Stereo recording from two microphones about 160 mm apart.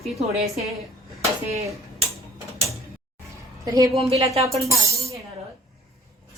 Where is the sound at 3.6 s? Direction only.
25° right (ahead or behind).